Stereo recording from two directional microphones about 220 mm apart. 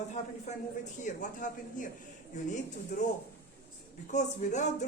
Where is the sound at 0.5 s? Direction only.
30° left (ahead or behind).